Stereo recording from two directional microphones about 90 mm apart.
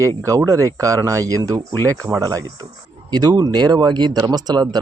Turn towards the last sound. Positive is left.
turn(degrees=-45)  # may be behind; listen again after turning